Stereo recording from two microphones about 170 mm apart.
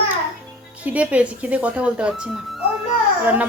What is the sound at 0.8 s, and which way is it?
Speech, 10° right (ahead or behind).